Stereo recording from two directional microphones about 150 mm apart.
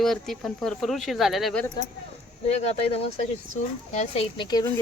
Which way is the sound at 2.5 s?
45° left (ahead or behind).